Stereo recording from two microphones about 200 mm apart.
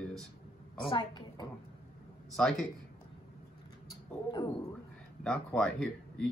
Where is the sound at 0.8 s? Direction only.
25° left (ahead or behind).